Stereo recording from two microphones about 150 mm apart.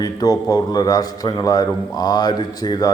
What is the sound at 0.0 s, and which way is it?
A man's voice, 25° left (ahead or behind).